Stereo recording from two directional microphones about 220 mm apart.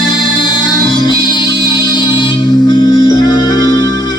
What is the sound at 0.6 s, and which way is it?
Music, 20° left (ahead or behind).